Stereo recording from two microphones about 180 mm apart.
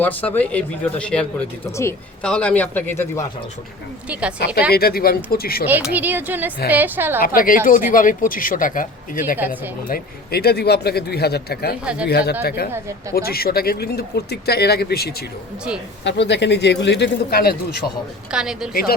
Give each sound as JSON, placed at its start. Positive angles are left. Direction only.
{"t": 0.0, "sound": "speech", "side_deg": 10}
{"t": 4.1, "sound": "speech", "side_deg": -5}
{"t": 4.7, "sound": "speech", "side_deg": 55}
{"t": 5.6, "sound": "speech", "side_deg": -10}
{"t": 7.2, "sound": "speech", "side_deg": 50}
{"t": 16.0, "sound": "speech", "side_deg": 75}
{"t": 18.3, "sound": "a woman's voice", "side_deg": -5}